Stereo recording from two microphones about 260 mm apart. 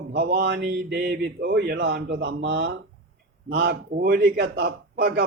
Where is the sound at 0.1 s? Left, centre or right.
Right.